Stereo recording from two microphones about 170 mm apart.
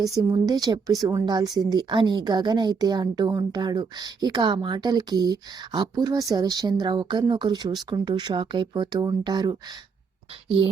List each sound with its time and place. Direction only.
0.0 s a woman's voice: 20° right (ahead or behind)